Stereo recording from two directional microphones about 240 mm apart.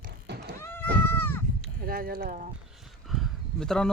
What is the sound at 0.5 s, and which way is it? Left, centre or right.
Goat, centre.